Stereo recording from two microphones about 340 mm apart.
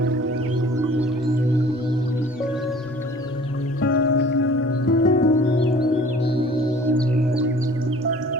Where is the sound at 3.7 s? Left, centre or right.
Left.